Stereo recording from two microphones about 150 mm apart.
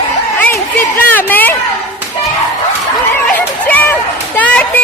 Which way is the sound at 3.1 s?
10° left (ahead or behind).